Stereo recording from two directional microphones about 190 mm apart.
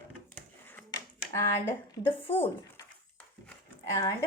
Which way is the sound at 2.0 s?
25° left (ahead or behind).